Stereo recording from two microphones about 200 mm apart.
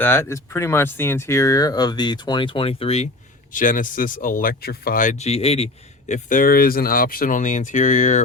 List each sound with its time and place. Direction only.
0.0 s speech: 10° left (ahead or behind); by 3.1 s 30° left (ahead or behind)
3.5 s speech: 40° left (ahead or behind)